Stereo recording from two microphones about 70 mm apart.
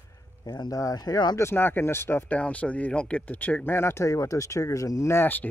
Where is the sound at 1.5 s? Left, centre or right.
Left.